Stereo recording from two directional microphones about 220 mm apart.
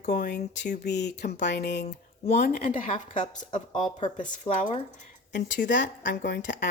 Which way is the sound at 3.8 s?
20° left (ahead or behind).